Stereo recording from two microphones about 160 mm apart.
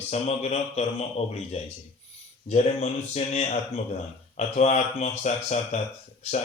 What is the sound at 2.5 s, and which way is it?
Mantra, 45° left (ahead or behind).